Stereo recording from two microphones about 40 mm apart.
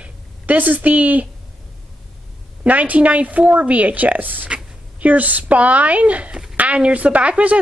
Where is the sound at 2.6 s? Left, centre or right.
Right.